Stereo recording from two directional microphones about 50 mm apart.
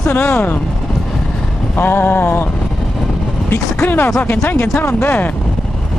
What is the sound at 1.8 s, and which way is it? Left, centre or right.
Speech, left.